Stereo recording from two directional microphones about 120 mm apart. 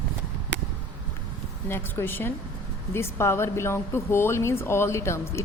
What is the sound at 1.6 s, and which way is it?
Speech, 20° left (ahead or behind).